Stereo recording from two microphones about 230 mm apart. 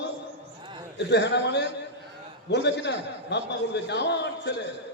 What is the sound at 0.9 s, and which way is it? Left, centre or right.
A man's voice, left.